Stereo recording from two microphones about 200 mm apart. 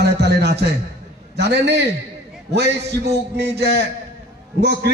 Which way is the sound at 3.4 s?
55° right (ahead or behind).